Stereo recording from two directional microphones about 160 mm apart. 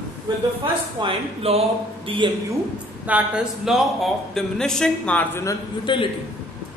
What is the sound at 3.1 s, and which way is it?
Speech, 5° right (ahead or behind).